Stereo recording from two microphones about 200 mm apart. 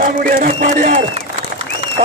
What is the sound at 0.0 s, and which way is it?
A man's voice, 40° right (ahead or behind).